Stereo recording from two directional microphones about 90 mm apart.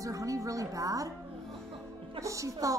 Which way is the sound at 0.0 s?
40° right (ahead or behind).